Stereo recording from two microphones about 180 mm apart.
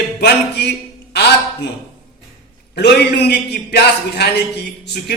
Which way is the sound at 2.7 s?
65° left (ahead or behind).